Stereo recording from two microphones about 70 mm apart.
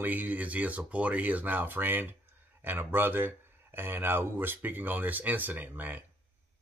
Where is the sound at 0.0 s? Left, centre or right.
Right.